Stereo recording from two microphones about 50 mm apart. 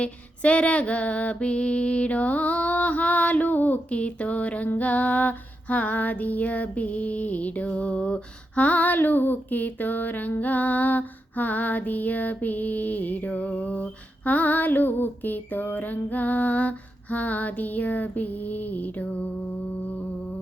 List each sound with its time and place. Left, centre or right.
0.0 s female singing: left
4.8 s music: left